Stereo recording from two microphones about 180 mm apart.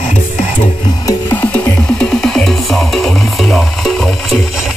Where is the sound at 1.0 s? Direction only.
10° left (ahead or behind).